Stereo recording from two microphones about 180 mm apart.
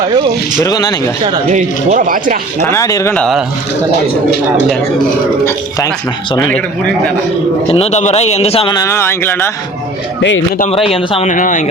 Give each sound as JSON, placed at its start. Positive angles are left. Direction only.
{"t": 0.6, "sound": "speech", "side_deg": 20}
{"t": 1.5, "sound": "speech", "side_deg": -45}
{"t": 2.6, "sound": "speech", "side_deg": 15}
{"t": 3.2, "sound": "speech", "side_deg": 0}
{"t": 7.7, "sound": "speech", "side_deg": 35}
{"t": 10.2, "sound": "a man's voice", "side_deg": 90}
{"t": 10.6, "sound": "speech", "side_deg": 35}